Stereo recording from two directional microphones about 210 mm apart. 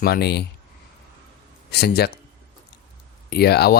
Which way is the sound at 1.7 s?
50° left (ahead or behind).